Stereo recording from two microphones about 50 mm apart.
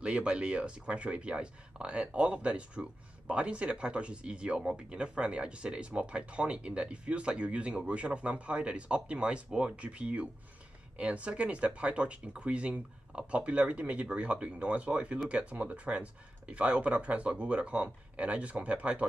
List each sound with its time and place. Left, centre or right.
0.0 s speech: right